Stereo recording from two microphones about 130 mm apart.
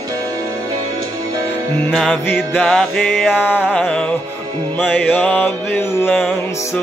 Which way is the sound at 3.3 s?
15° left (ahead or behind).